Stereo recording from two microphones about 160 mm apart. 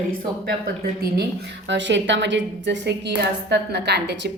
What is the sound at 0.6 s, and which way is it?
A woman's voice, 75° right (ahead or behind).